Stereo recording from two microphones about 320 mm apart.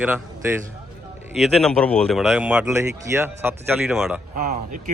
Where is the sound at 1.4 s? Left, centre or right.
Centre.